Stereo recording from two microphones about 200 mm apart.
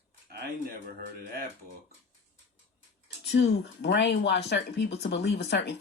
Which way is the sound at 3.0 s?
60° left (ahead or behind).